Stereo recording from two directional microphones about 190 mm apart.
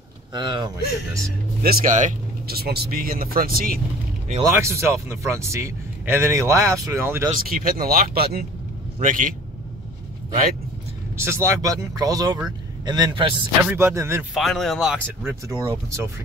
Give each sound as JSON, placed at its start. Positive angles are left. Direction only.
{"t": 0.3, "sound": "a man's voice", "side_deg": -25}
{"t": 1.6, "sound": "speech", "side_deg": -50}
{"t": 4.4, "sound": "a man's voice", "side_deg": -15}
{"t": 7.4, "sound": "speech", "side_deg": -50}
{"t": 11.1, "sound": "a man's voice", "side_deg": -15}
{"t": 13.7, "sound": "a man's voice", "side_deg": -10}
{"t": 14.3, "sound": "a man's voice", "side_deg": 0}